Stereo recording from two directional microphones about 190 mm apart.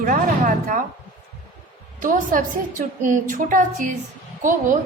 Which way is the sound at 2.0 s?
45° right (ahead or behind).